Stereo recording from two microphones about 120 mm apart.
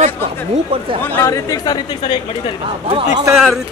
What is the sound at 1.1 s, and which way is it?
Speech, 25° left (ahead or behind).